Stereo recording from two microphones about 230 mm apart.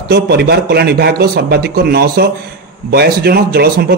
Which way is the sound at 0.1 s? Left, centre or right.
Right.